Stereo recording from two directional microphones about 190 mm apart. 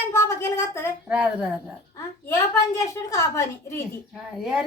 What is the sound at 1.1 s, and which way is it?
Speech, 5° right (ahead or behind).